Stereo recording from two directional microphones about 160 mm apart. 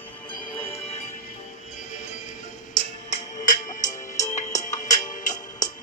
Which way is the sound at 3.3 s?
50° left (ahead or behind).